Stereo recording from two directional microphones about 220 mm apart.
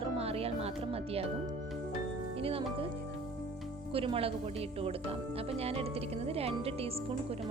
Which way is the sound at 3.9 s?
25° right (ahead or behind).